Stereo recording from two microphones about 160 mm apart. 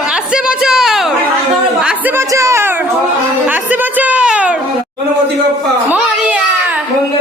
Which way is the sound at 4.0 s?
10° right (ahead or behind).